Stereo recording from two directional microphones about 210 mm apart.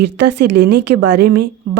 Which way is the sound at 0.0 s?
55° right (ahead or behind).